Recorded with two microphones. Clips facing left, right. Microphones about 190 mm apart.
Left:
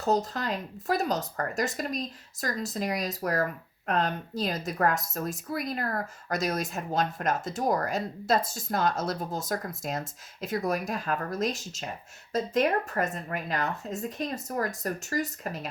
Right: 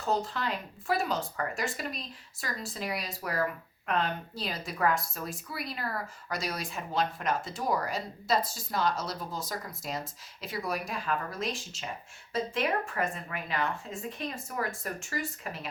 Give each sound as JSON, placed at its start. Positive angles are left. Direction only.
{"t": 0.0, "sound": "a woman's voice", "side_deg": 40}